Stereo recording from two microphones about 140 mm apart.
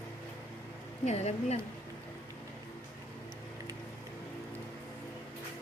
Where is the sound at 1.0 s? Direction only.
50° left (ahead or behind).